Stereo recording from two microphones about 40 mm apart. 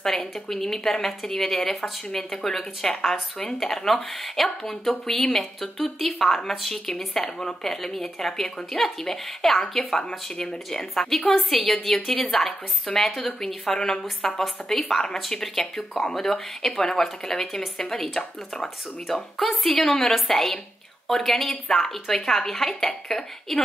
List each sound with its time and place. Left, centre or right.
0.0 s speech: centre